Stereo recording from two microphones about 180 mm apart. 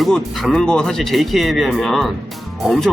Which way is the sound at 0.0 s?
Centre (ahead or behind).